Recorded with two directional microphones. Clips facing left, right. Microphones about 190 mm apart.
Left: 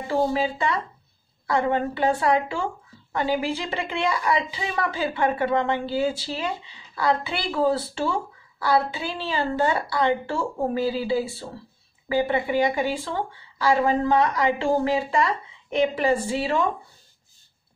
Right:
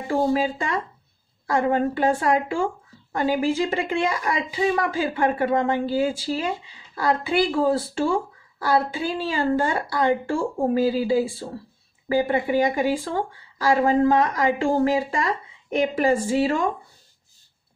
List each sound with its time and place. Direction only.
0.3 s speech: 45° right (ahead or behind)